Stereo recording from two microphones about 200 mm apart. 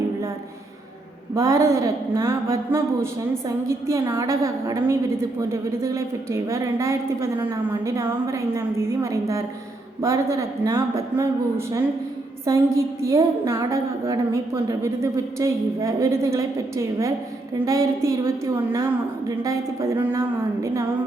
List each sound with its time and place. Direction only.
1.4 s a woman's voice: 15° right (ahead or behind)